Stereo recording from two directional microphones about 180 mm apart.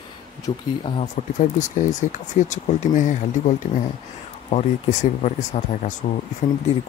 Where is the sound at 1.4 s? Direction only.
45° left (ahead or behind).